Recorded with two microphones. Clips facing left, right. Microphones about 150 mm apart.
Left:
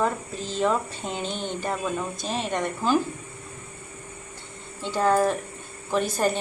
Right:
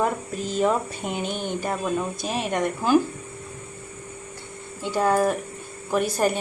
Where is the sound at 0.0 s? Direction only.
10° right (ahead or behind).